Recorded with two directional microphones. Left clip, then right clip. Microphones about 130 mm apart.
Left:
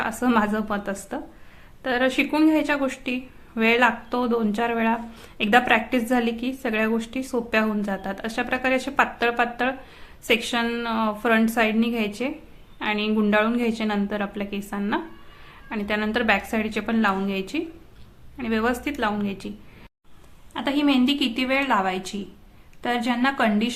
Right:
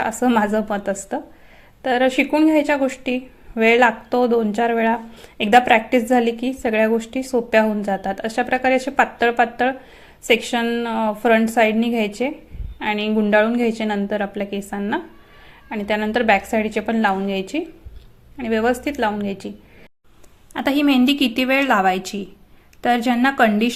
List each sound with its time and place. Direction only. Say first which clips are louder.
0.0 s a woman's voice: right 4 dB; 25° right (ahead or behind)
20.5 s a woman's voice: right 4 dB; 45° right (ahead or behind)